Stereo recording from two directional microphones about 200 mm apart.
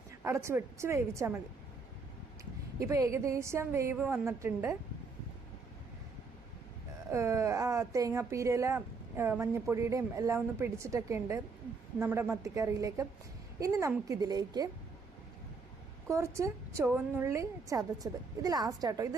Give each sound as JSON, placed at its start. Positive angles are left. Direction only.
{"t": 0.3, "sound": "a woman's voice", "side_deg": -15}
{"t": 2.4, "sound": "a woman's voice", "side_deg": -15}
{"t": 7.1, "sound": "a woman's voice", "side_deg": -15}
{"t": 16.0, "sound": "a woman's voice", "side_deg": -15}